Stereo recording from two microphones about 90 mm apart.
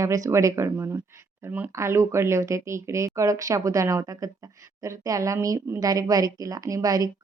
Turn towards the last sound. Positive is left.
turn(degrees=-40)  # may be behind; listen again after turning